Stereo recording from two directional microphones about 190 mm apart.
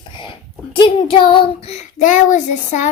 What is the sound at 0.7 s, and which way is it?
Child singing, 25° left (ahead or behind).